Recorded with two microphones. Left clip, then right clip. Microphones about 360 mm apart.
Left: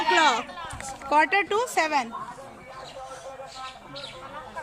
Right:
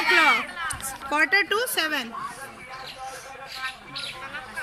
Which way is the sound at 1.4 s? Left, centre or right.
Centre.